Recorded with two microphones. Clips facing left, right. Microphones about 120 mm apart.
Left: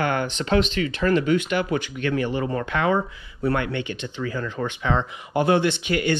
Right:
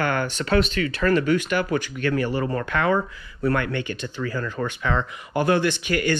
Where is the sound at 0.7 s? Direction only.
45° right (ahead or behind).